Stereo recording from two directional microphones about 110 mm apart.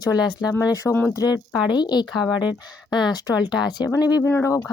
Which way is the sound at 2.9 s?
40° left (ahead or behind).